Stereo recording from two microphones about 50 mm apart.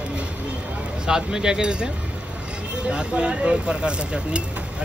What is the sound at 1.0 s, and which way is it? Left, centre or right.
Speech, centre.